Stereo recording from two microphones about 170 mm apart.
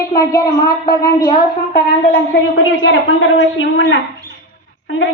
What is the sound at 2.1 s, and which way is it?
A woman's voice, 80° left.